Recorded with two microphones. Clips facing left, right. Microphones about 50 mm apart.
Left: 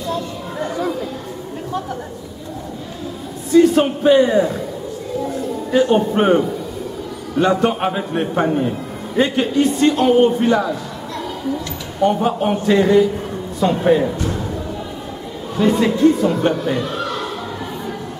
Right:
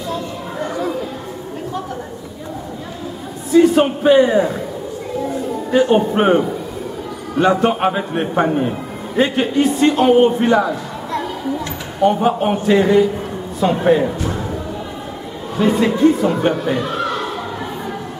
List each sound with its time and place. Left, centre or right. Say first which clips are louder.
3.5 s a man's voice: right 1 dB; centre
5.7 s a man's voice: right 1 dB; centre
15.5 s speech: even; centre